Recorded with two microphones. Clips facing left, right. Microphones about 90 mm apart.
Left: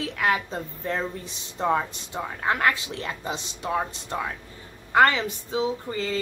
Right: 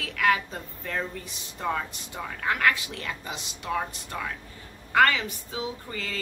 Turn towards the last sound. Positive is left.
turn(degrees=25)  # may be behind; listen again after turning